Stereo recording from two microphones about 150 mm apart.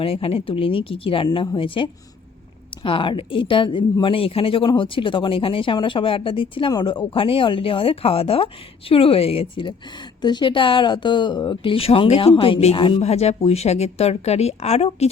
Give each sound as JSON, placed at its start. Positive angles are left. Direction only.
{"t": 0.0, "sound": "a woman's voice", "side_deg": 40}